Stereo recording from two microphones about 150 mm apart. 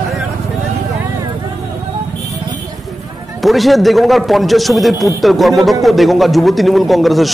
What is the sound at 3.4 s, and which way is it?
A man's voice, centre (ahead or behind).